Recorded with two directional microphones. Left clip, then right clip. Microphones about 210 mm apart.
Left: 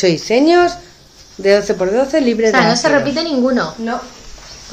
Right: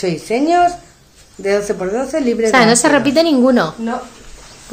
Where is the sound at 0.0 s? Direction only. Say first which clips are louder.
Left 5 dB; 30° left (ahead or behind).